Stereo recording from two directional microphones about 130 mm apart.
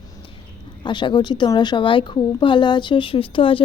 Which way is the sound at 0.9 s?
35° left (ahead or behind).